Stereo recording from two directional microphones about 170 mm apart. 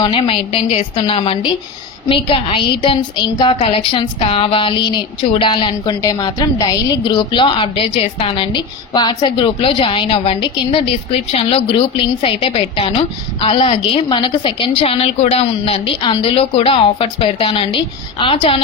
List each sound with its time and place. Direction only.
0.0 s a woman's voice: 30° left (ahead or behind)